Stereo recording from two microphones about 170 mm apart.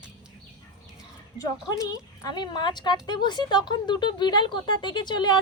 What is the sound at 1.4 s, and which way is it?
Speech, 20° left (ahead or behind).